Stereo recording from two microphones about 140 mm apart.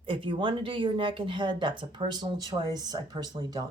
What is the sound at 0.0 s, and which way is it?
Speech, 35° right (ahead or behind).